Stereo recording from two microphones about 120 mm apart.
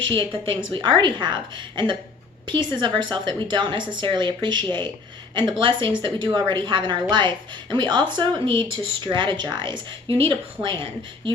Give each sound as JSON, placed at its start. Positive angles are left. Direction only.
{"t": 0.2, "sound": "a woman's voice", "side_deg": -45}